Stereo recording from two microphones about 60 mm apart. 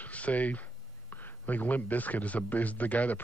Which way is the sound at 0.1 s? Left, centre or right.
Left.